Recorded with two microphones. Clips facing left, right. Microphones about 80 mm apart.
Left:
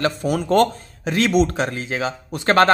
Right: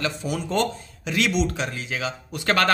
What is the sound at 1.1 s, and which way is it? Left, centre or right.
Speech, left.